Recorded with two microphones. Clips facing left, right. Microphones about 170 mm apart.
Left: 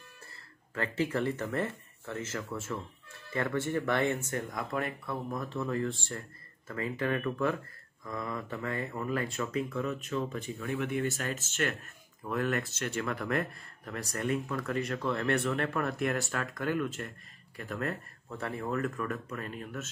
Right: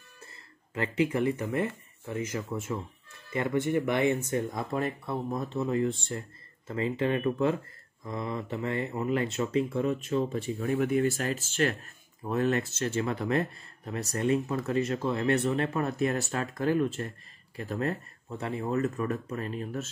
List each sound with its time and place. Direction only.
0.7 s speech: 15° right (ahead or behind)